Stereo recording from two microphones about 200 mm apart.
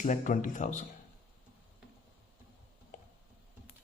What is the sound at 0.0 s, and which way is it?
Speech, 40° left (ahead or behind).